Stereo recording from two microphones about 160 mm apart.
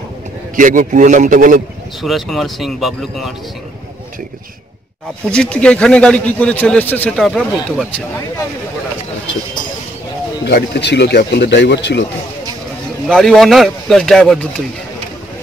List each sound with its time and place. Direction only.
0.6 s a man's voice: 55° right (ahead or behind)
2.0 s speech: centre (ahead or behind)
5.3 s a man's voice: 5° left (ahead or behind)
10.4 s speech: 90° left
13.0 s speech: 5° left (ahead or behind)